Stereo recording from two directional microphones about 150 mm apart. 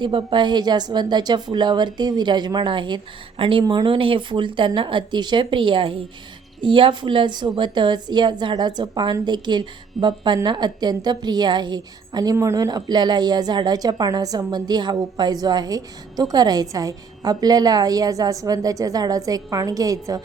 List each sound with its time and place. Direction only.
0.0 s a woman's voice: 35° right (ahead or behind)